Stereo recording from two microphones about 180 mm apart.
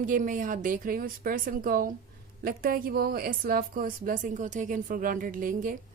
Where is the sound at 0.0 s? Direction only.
45° right (ahead or behind).